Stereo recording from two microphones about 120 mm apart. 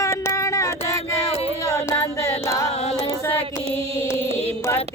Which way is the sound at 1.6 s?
25° left (ahead or behind).